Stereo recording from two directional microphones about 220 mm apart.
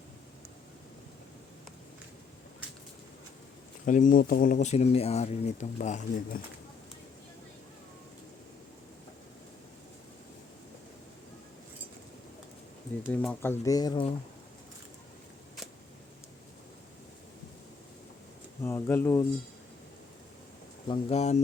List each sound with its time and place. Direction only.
3.8 s speech: 35° left (ahead or behind)
13.1 s speech: 10° left (ahead or behind)
18.6 s speech: 10° left (ahead or behind)
20.8 s speech: 25° left (ahead or behind)